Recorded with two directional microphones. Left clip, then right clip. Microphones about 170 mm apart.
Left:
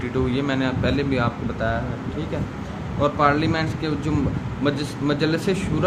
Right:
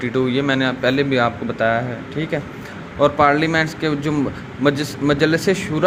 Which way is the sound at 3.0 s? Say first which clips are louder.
Right 5 dB; 35° right (ahead or behind).